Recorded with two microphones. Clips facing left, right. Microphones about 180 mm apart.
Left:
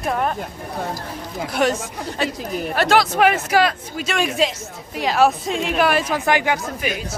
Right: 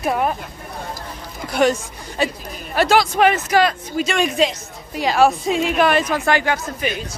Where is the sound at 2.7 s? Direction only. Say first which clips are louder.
Right 2 dB; centre (ahead or behind).